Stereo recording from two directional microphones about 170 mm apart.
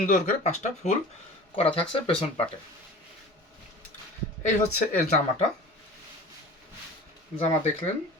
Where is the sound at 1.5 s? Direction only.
35° left (ahead or behind).